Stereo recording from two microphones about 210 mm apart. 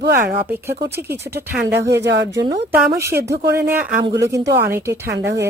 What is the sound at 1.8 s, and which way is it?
Speech, 55° right (ahead or behind).